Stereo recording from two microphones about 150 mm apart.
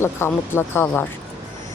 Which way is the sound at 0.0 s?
15° left (ahead or behind).